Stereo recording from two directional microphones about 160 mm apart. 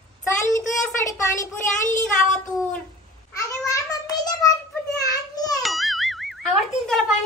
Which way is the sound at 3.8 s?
25° left (ahead or behind).